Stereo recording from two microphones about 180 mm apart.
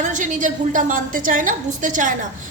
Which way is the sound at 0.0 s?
45° right (ahead or behind).